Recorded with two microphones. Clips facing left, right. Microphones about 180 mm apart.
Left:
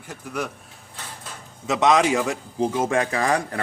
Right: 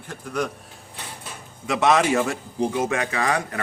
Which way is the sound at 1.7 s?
20° left (ahead or behind).